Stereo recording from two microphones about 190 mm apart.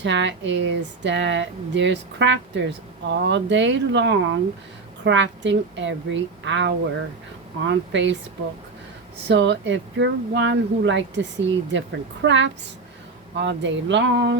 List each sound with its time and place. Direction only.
0.0 s speech: 70° right (ahead or behind)
9.2 s speech: 70° right (ahead or behind)